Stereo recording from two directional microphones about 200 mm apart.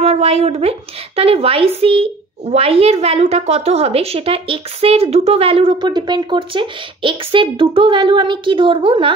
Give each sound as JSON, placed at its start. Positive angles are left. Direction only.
{"t": 0.0, "sound": "a woman's voice", "side_deg": -30}